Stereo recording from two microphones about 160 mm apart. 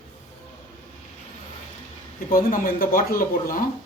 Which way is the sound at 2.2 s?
60° left (ahead or behind).